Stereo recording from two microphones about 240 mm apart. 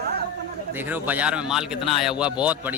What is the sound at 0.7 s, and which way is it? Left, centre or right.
Speech, centre.